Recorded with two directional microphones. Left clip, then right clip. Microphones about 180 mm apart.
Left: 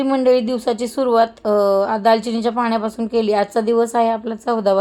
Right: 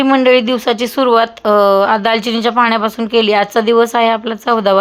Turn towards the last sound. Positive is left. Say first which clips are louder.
# right 6 dB
turn(degrees=-15)  # may be behind; listen again after turning